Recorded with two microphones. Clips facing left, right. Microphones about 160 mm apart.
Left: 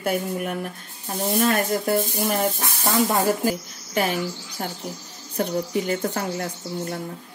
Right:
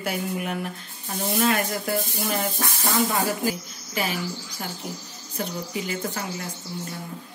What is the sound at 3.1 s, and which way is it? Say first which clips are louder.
Speech: left 4 dB; 45° left (ahead or behind).